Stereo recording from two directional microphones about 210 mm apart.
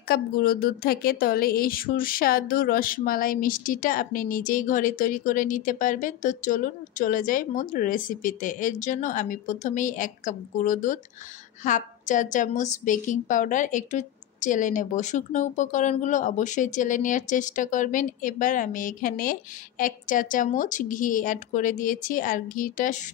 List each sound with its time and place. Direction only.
0.1 s a woman's voice: 45° left (ahead or behind)